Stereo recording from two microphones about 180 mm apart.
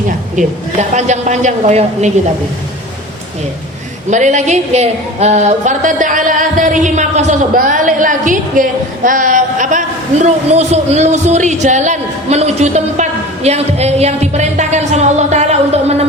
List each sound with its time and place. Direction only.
0.3 s a woman's voice: 40° right (ahead or behind)
4.1 s a woman's voice: 40° right (ahead or behind)